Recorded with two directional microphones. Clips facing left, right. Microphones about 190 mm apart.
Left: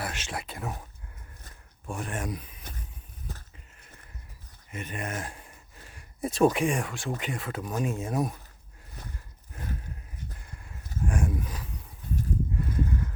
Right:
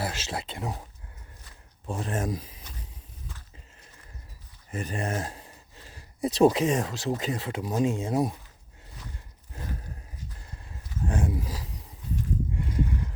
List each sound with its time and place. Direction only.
0.0 s speech: 30° right (ahead or behind)
1.9 s speech: 30° right (ahead or behind)
4.7 s a sound: 35° right (ahead or behind)
6.3 s speech: 30° right (ahead or behind)
6.9 s speech: 35° right (ahead or behind)
7.3 s speech: 25° right (ahead or behind)
9.1 s roaring cats: 25° right (ahead or behind)
10.4 s dog: 30° right (ahead or behind)
11.0 s wild animals: 25° right (ahead or behind)
12.5 s a sound: 20° right (ahead or behind)